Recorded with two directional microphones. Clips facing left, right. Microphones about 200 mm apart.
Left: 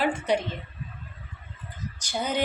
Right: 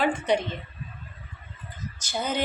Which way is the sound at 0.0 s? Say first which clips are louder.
Right 1 dB; 10° left (ahead or behind).